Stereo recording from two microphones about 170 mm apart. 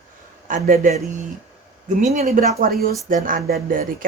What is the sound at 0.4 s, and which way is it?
Speech, 50° right (ahead or behind).